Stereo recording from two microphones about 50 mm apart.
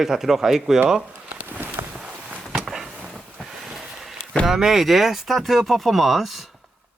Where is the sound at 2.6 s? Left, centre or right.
Centre.